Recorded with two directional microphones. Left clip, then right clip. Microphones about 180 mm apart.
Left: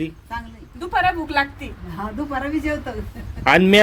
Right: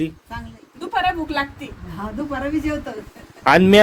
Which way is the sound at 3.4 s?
15° right (ahead or behind).